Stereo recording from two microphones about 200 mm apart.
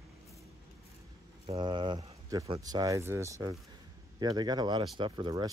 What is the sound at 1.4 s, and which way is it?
Speech, 25° right (ahead or behind).